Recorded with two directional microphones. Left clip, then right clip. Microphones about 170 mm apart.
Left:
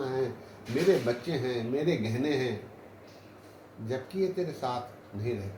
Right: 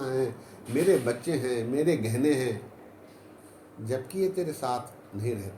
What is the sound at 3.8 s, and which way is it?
Speech, 50° right (ahead or behind).